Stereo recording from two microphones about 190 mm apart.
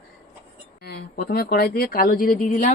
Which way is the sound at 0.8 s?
55° left (ahead or behind).